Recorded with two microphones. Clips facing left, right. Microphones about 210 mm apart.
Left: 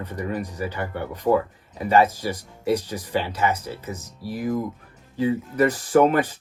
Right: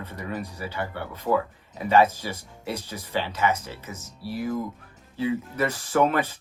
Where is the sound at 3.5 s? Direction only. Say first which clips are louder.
Left 2 dB; 10° left (ahead or behind).